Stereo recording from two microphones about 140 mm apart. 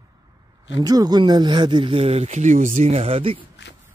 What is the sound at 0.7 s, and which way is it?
Speech, 30° right (ahead or behind).